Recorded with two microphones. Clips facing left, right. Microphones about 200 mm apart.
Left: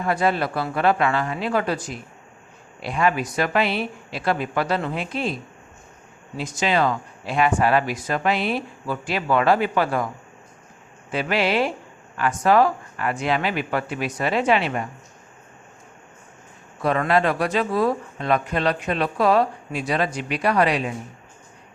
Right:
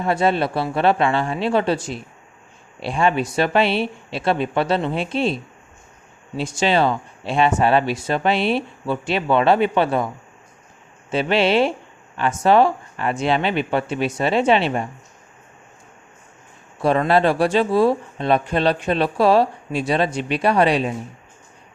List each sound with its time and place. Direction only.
0.0 s speech: 25° right (ahead or behind)
11.1 s speech: 25° right (ahead or behind)
16.8 s speech: 30° right (ahead or behind)